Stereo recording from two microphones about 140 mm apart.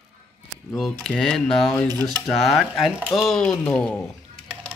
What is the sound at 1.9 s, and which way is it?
Speech, 30° right (ahead or behind).